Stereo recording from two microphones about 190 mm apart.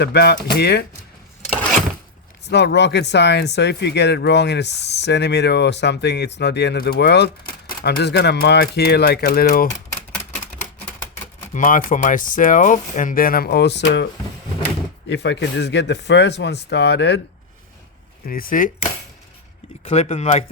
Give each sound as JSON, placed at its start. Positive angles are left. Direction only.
{"t": 0.0, "sound": "speech", "side_deg": 60}
{"t": 2.5, "sound": "speech", "side_deg": 65}
{"t": 11.5, "sound": "speech", "side_deg": 45}
{"t": 15.1, "sound": "speech", "side_deg": 65}
{"t": 18.3, "sound": "speech", "side_deg": 50}
{"t": 19.8, "sound": "speech", "side_deg": 35}